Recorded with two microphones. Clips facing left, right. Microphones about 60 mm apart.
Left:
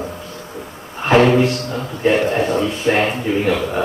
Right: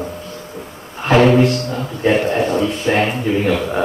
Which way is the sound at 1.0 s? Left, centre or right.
Centre.